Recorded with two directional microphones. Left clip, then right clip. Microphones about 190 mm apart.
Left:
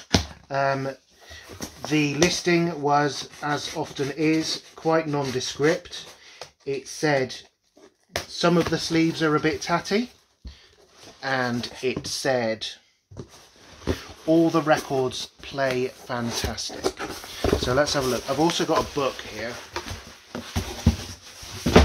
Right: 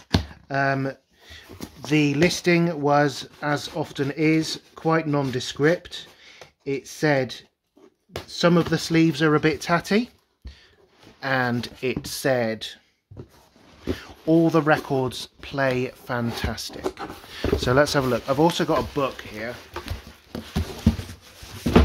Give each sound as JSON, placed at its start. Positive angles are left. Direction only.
{"t": 0.5, "sound": "a sound", "side_deg": -55}
{"t": 1.9, "sound": "speech", "side_deg": -55}
{"t": 8.4, "sound": "speech", "side_deg": -55}
{"t": 11.1, "sound": "speech", "side_deg": -50}
{"t": 14.2, "sound": "speech", "side_deg": -50}
{"t": 20.9, "sound": "a sound", "side_deg": -50}